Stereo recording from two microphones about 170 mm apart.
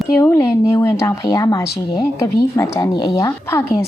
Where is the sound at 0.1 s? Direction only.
15° left (ahead or behind).